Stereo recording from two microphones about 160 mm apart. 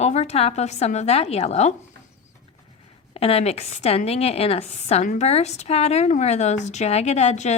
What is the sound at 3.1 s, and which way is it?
A woman's voice, 35° left (ahead or behind).